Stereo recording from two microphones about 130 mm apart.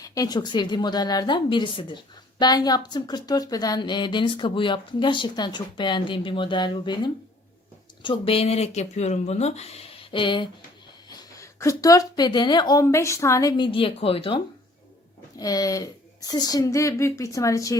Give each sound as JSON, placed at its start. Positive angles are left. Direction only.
{"t": 0.0, "sound": "speech", "side_deg": 30}
{"t": 11.1, "sound": "a woman's voice", "side_deg": 25}
{"t": 12.8, "sound": "a woman's voice", "side_deg": 20}
{"t": 13.7, "sound": "speech", "side_deg": 45}
{"t": 15.4, "sound": "a woman's voice", "side_deg": 30}